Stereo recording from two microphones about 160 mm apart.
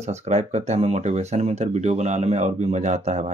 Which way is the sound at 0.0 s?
45° right (ahead or behind).